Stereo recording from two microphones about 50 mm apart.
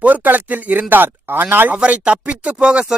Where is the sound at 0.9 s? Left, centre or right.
Right.